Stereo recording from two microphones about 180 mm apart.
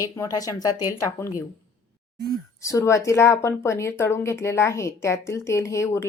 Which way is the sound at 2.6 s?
15° left (ahead or behind).